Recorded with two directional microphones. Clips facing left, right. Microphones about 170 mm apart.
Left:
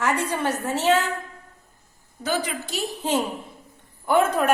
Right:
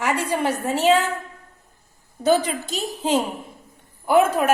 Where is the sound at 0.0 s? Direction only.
10° right (ahead or behind).